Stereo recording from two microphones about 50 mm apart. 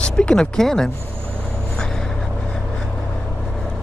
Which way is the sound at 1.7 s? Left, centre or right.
Centre.